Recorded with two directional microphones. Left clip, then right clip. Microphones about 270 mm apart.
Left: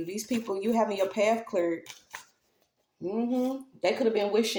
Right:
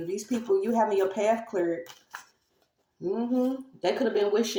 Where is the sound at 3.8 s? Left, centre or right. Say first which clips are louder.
Even; left.